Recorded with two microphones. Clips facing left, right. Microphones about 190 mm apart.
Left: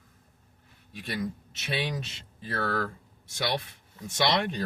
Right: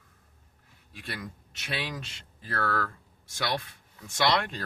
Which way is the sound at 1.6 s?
20° left (ahead or behind).